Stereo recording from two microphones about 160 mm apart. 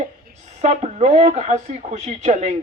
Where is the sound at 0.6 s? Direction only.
45° right (ahead or behind).